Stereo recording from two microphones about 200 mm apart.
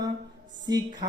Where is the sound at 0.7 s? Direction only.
20° right (ahead or behind).